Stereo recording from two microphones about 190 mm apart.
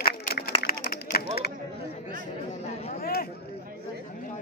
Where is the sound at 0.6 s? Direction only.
55° left (ahead or behind).